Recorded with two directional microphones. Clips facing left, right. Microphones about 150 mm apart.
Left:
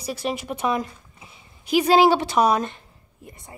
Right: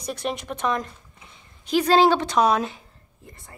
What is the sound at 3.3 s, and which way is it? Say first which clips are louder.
Speech: left 3 dB; 20° left (ahead or behind).